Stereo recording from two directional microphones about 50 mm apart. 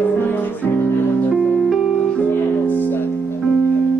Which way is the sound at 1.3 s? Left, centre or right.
Centre.